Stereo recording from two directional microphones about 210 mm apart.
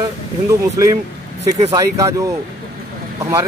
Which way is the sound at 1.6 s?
20° right (ahead or behind).